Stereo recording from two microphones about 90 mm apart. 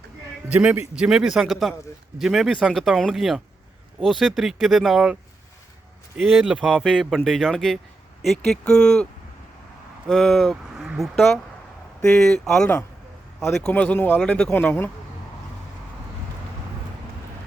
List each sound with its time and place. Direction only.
0.5 s a man's voice: 10° right (ahead or behind)
6.1 s speech: 5° right (ahead or behind)
10.1 s speech: centre (ahead or behind)
13.7 s speech: 20° left (ahead or behind)